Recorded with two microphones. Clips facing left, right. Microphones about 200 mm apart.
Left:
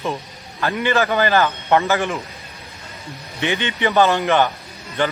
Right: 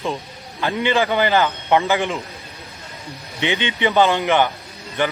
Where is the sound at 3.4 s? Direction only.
15° right (ahead or behind).